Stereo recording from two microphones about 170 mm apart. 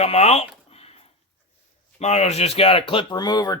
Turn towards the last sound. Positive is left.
turn(degrees=25)  # may be behind; listen again after turning